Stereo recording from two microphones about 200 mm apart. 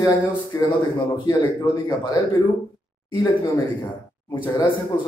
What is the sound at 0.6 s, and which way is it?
A man's voice, 25° left (ahead or behind).